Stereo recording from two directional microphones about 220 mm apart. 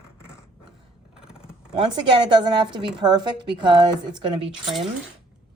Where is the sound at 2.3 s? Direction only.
20° right (ahead or behind).